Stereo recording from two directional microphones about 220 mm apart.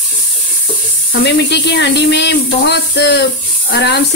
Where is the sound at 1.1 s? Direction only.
50° left (ahead or behind).